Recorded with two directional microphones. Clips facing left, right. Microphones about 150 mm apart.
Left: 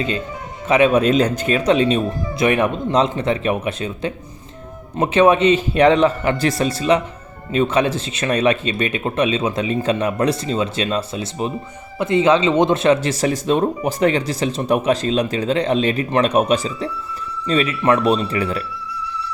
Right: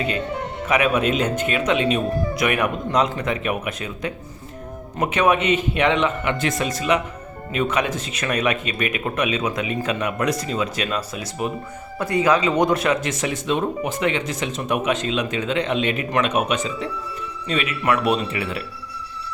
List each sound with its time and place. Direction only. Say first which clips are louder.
0.7 s speech: left 6 dB; 30° left (ahead or behind)